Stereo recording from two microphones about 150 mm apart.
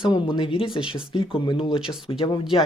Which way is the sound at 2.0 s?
35° left (ahead or behind).